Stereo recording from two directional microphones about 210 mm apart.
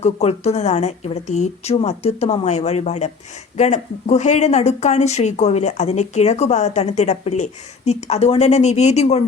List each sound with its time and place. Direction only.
0.0 s speech: 30° left (ahead or behind)